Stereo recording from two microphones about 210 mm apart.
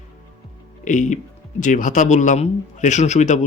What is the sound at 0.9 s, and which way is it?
Speech, 35° left (ahead or behind).